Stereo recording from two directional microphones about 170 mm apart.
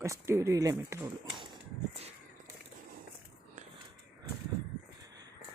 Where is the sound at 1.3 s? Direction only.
25° right (ahead or behind).